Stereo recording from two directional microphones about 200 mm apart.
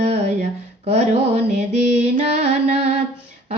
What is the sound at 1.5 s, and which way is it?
Music, 35° right (ahead or behind).